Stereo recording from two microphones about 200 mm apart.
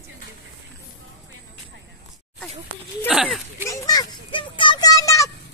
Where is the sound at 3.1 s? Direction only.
Centre (ahead or behind).